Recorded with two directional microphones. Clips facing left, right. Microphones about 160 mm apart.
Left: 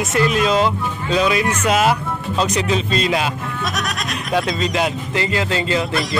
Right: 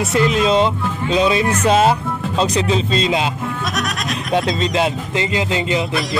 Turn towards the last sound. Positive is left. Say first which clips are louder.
# right 1 dB
turn(degrees=-20)  # may be behind; listen again after turning